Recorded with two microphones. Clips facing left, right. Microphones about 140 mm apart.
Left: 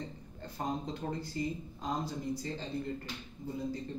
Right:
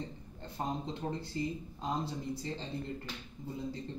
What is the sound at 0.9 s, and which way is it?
Speech, 25° right (ahead or behind).